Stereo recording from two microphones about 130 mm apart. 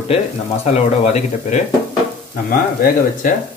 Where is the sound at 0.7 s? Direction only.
55° left (ahead or behind).